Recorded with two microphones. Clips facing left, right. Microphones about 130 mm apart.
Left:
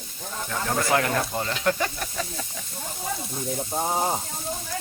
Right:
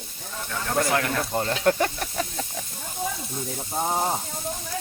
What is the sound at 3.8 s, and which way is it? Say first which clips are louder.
Speech: right 1 dB; centre (ahead or behind).